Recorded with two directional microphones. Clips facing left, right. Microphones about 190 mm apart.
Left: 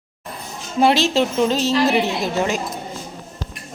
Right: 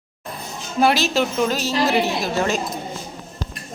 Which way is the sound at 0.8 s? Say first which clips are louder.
Left 2 dB; 25° left (ahead or behind).